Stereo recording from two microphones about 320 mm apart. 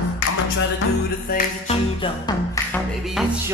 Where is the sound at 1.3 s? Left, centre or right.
Centre.